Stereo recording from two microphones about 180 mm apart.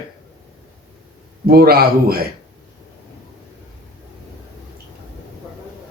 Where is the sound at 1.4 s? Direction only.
60° right (ahead or behind).